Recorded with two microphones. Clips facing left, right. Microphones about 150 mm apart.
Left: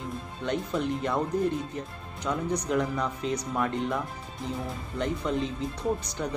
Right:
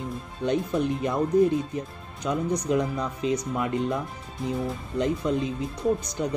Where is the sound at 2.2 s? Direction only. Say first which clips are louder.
Right 3 dB; 15° right (ahead or behind).